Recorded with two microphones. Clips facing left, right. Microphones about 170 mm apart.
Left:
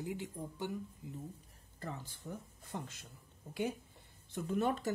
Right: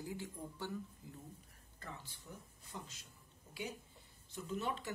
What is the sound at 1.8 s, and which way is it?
A man's voice, 45° left (ahead or behind).